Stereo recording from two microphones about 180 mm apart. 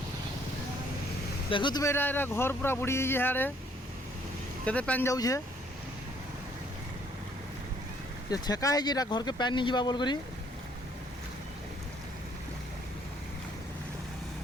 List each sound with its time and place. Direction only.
1.5 s speech: 25° left (ahead or behind); by 3.5 s 10° left (ahead or behind)
4.6 s speech: 5° left (ahead or behind)
8.3 s speech: 20° left (ahead or behind)